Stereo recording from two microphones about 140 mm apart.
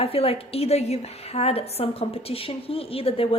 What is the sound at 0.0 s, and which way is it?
A woman's voice, 45° left (ahead or behind).